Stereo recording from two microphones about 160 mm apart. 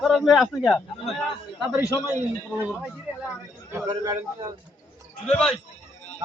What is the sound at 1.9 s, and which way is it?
Speech, 20° left (ahead or behind).